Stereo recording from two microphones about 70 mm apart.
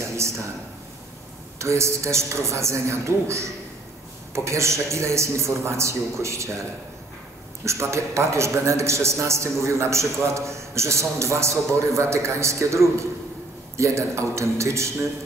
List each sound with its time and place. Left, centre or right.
0.2 s a man's voice: right
1.6 s a man's voice: right
7.6 s a man's voice: right